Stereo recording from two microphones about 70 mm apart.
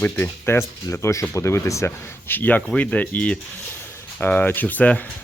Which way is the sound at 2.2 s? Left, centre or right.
Left.